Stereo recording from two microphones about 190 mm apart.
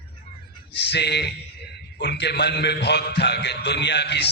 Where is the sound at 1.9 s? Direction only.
60° left (ahead or behind).